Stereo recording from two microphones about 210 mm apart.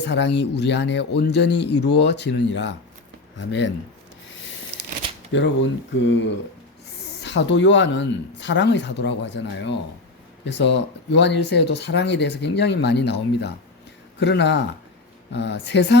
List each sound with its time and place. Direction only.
0.0 s speech: 55° left (ahead or behind)
5.3 s speech: 60° left (ahead or behind)